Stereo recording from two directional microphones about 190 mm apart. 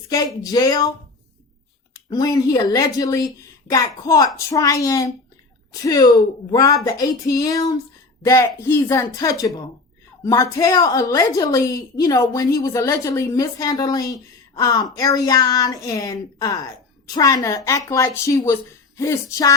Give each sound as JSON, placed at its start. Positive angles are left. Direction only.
{"t": 0.4, "sound": "speech", "side_deg": 20}
{"t": 1.9, "sound": "a woman's voice", "side_deg": 20}